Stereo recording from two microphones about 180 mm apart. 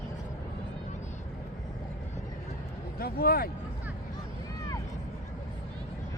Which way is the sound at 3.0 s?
55° left (ahead or behind).